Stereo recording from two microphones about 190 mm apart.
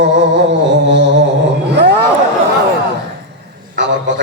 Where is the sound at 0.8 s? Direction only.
70° right (ahead or behind).